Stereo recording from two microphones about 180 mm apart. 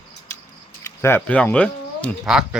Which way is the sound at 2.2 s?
5° right (ahead or behind).